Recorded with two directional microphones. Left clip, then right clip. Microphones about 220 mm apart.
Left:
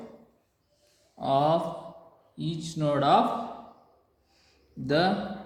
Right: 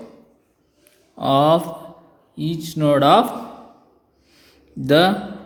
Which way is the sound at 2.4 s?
35° right (ahead or behind).